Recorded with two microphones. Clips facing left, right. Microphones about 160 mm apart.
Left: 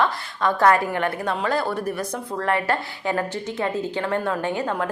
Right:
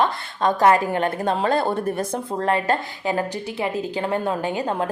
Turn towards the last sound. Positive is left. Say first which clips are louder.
# right 1 dB
turn(degrees=-20)  # may be behind; listen again after turning